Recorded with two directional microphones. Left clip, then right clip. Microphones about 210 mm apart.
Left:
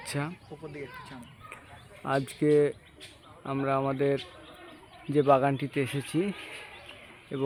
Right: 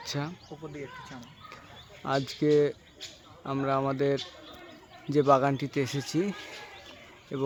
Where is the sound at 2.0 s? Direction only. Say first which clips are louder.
Even; 5° left (ahead or behind).